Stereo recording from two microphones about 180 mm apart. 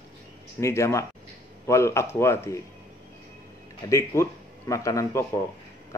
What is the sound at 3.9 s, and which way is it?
A man's voice, 15° left (ahead or behind).